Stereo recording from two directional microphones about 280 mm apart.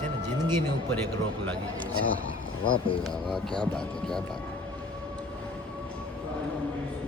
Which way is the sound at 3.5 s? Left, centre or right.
Centre.